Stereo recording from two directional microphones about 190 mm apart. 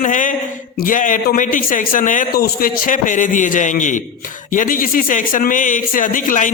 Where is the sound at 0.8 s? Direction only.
45° left (ahead or behind).